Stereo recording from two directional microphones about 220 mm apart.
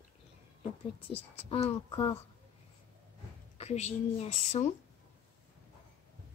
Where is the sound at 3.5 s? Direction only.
30° left (ahead or behind).